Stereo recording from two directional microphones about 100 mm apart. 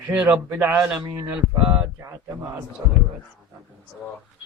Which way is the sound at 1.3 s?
15° right (ahead or behind).